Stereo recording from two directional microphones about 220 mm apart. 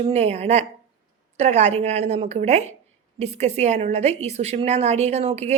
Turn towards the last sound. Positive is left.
turn(degrees=-30)  # may be behind; listen again after turning